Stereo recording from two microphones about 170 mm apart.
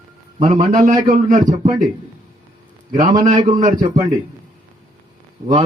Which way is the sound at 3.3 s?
45° right (ahead or behind).